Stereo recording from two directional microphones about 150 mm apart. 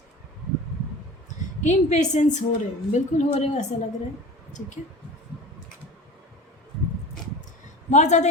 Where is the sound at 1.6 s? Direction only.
50° left (ahead or behind).